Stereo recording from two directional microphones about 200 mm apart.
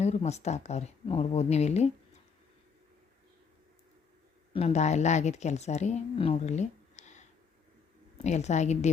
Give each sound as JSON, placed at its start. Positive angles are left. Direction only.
{"t": 0.0, "sound": "a woman's voice", "side_deg": 35}
{"t": 4.5, "sound": "a woman's voice", "side_deg": 35}